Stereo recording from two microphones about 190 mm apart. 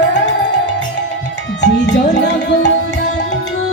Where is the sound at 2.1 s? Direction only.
65° left (ahead or behind).